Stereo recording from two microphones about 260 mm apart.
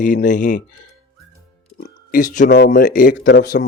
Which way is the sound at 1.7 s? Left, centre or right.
Left.